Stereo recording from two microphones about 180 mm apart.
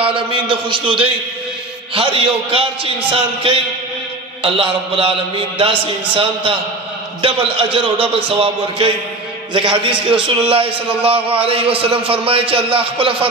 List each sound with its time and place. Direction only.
0.0 s a man's voice: 30° right (ahead or behind)